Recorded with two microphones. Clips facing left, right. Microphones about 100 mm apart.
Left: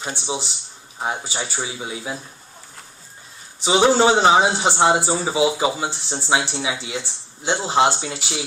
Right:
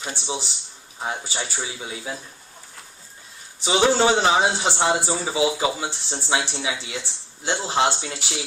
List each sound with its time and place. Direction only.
0.1 s speech: 20° left (ahead or behind)
3.6 s speech: 25° left (ahead or behind)